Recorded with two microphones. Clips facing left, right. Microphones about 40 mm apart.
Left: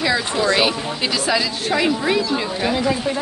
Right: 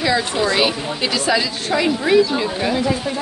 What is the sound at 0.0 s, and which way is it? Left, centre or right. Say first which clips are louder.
Speech: right 1 dB; centre.